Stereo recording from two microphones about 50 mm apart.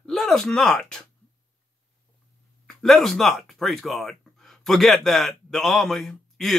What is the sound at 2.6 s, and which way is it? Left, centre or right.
Speech, centre.